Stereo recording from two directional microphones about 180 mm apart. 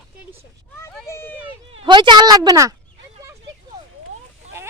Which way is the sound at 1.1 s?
15° left (ahead or behind).